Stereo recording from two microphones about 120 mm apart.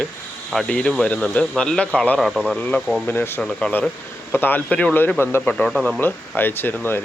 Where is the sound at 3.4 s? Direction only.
5° left (ahead or behind).